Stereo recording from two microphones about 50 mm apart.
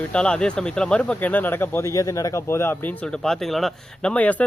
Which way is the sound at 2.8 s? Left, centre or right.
Left.